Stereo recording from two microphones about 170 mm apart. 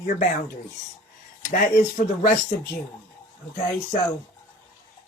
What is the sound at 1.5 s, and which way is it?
Speech, 55° left (ahead or behind).